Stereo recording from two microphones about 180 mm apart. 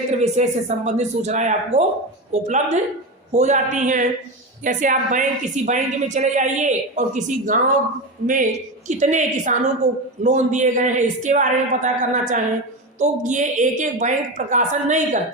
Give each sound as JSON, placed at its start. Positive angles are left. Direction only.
{"t": 0.2, "sound": "a woman's voice", "side_deg": -40}